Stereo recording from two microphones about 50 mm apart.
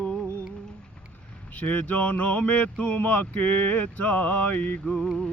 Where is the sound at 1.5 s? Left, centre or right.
Left.